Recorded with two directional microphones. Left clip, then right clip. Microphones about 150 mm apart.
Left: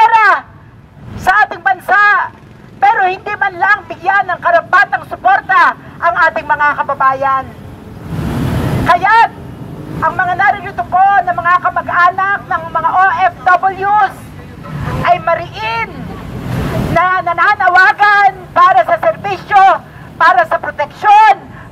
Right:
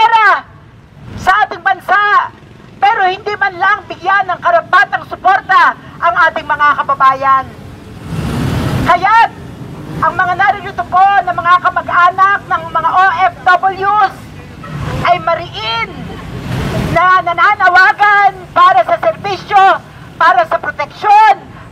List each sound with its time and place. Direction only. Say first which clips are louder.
0.1 s fowl: even; 20° left (ahead or behind)
1.2 s a sound: even; 25° left (ahead or behind)
8.8 s a man's voice: even; 20° left (ahead or behind)
16.9 s a woman's voice: right 3 dB; 20° left (ahead or behind)